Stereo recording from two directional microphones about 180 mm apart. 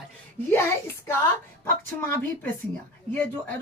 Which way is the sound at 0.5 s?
15° left (ahead or behind).